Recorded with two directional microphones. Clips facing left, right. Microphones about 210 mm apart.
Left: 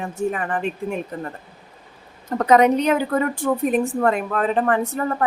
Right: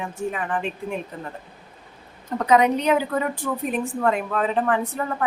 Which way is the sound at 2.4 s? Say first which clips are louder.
Left 3 dB; 45° left (ahead or behind).